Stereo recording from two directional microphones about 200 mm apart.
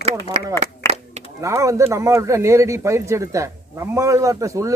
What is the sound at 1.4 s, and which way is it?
Speech, 15° right (ahead or behind).